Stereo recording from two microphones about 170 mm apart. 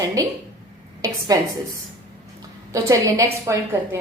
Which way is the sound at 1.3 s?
20° right (ahead or behind).